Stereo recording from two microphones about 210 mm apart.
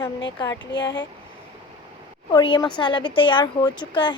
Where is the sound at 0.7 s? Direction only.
60° left (ahead or behind).